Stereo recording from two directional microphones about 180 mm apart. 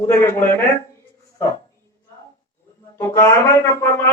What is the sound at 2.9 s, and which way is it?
Speech, 15° left (ahead or behind).